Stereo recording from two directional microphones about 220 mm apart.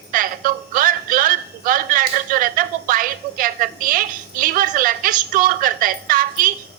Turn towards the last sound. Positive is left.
turn(degrees=-40)  # may be behind; listen again after turning